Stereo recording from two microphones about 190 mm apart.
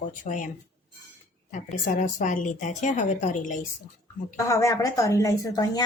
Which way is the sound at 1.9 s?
40° left (ahead or behind).